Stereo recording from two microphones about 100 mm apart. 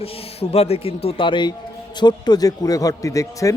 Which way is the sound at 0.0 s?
90° left.